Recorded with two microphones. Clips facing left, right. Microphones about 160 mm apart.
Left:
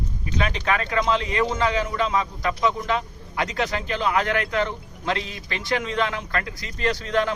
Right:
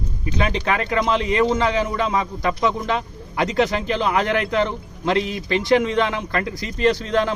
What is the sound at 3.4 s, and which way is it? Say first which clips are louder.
Speech: right 6 dB; 25° right (ahead or behind).